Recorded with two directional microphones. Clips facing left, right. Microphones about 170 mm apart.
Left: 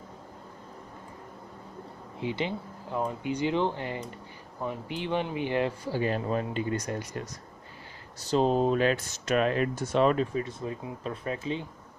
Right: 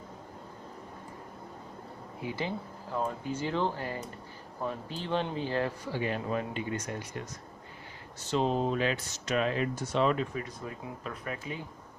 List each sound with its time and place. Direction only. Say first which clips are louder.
2.1 s speech: left 3 dB; 20° left (ahead or behind)
5.9 s speech: left 4 dB; 35° left (ahead or behind); by 10.1 s 55° left (ahead or behind)
10.1 s speech: left 5 dB; 30° left (ahead or behind)